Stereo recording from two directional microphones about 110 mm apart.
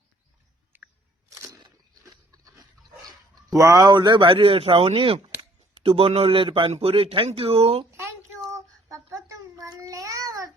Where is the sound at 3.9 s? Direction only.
45° right (ahead or behind).